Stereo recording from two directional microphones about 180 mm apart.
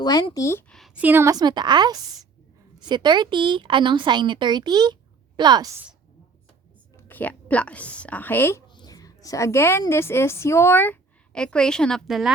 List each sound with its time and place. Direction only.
0.0 s speech: 20° left (ahead or behind)
0.7 s a woman's voice: centre (ahead or behind); by 5.7 s 25° right (ahead or behind)
6.9 s a woman's voice: 10° left (ahead or behind)